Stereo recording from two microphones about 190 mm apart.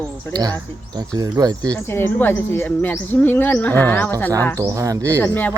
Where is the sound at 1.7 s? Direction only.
10° left (ahead or behind).